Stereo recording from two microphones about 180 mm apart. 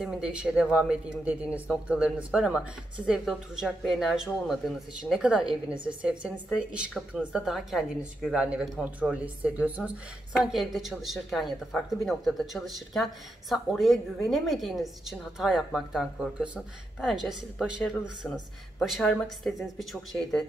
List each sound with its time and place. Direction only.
0.0 s speech: 5° right (ahead or behind)